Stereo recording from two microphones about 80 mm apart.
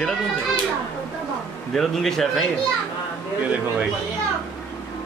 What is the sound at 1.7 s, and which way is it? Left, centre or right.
Speech, centre.